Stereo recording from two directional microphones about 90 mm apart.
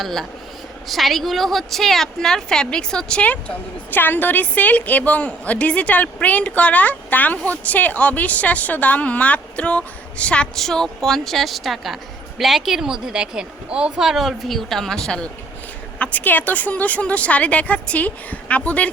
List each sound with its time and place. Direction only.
0.0 s a woman's voice: 5° left (ahead or behind)